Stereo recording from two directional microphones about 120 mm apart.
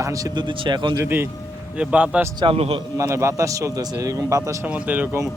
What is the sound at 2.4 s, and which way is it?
Speech, 50° right (ahead or behind).